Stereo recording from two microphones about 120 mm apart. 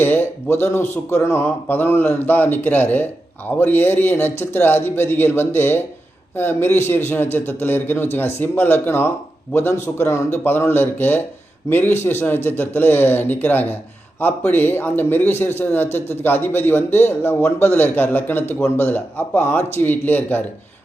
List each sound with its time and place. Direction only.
0.0 s a man's voice: 15° left (ahead or behind)